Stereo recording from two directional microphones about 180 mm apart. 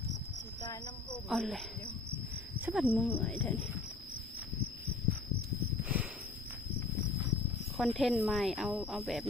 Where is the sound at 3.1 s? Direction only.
10° left (ahead or behind).